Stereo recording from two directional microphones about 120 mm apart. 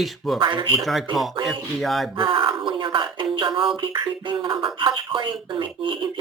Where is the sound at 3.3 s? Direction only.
40° right (ahead or behind).